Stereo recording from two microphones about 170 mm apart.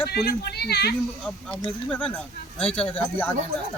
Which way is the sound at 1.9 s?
5° left (ahead or behind).